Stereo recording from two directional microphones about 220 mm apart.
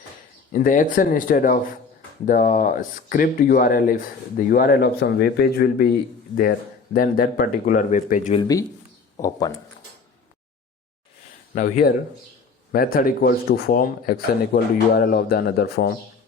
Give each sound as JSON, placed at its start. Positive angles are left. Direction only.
{"t": 0.5, "sound": "speech", "side_deg": 35}
{"t": 8.4, "sound": "speech", "side_deg": 15}
{"t": 11.5, "sound": "speech", "side_deg": 40}